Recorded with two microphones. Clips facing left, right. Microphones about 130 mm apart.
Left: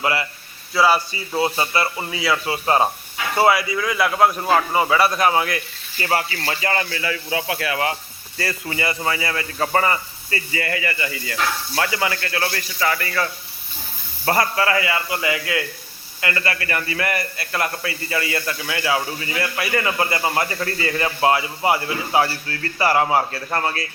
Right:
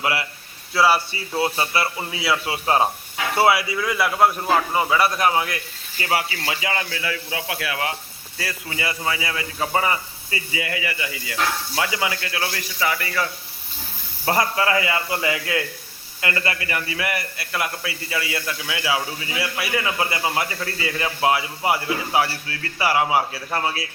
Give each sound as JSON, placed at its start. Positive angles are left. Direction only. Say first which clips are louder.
{"t": 0.0, "sound": "a man's voice", "louder": "left 2 dB", "side_deg": -5}
{"t": 1.5, "sound": "speech", "louder": "left 1 dB", "side_deg": 10}
{"t": 1.7, "sound": "a man's voice", "louder": "left 2 dB", "side_deg": -5}
{"t": 14.3, "sound": "a man's voice", "louder": "left 1 dB", "side_deg": -20}